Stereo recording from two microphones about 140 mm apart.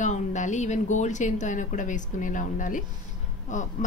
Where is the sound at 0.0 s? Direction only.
60° left (ahead or behind).